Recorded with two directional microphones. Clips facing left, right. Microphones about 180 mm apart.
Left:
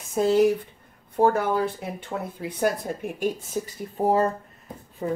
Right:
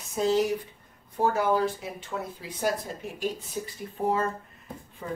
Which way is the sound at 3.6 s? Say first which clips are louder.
Left 5 dB; 45° left (ahead or behind).